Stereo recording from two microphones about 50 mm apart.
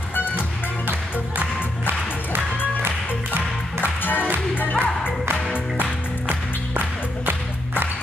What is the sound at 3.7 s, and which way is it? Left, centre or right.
Music, left.